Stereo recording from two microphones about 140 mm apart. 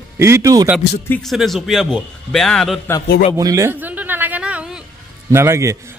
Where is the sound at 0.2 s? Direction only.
20° right (ahead or behind).